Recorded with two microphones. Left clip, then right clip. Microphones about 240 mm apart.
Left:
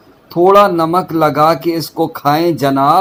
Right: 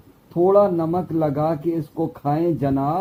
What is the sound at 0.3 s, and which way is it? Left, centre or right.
Speech, left.